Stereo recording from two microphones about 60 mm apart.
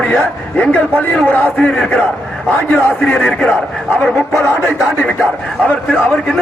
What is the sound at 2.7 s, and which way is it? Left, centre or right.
Speech, left.